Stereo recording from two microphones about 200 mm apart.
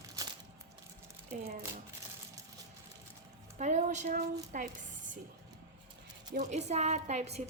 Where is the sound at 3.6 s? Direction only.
35° right (ahead or behind).